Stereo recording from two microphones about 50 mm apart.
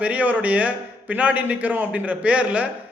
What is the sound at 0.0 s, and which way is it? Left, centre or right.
A man's voice, right.